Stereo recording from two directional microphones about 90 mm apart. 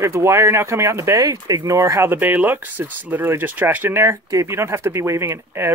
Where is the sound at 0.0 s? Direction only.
30° right (ahead or behind).